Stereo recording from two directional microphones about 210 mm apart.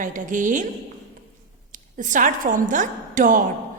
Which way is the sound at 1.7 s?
40° right (ahead or behind).